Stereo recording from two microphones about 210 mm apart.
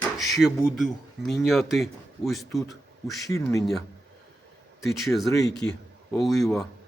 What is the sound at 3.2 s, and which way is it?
Speech, 15° left (ahead or behind).